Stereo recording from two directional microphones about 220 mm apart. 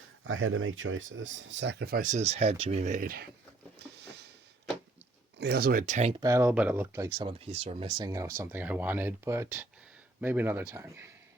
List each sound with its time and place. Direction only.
0.3 s speech: 65° right (ahead or behind); by 3.2 s 40° right (ahead or behind)
3.8 s a sound: 50° right (ahead or behind)
5.4 s speech: 45° right (ahead or behind); by 6.2 s 30° right (ahead or behind)
6.2 s speech: 10° right (ahead or behind)